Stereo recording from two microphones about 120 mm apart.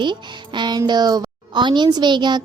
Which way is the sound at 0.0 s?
40° right (ahead or behind).